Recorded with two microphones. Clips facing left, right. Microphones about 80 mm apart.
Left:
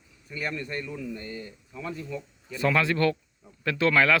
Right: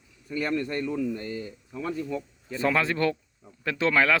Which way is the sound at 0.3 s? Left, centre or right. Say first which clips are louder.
Right 5 dB; right.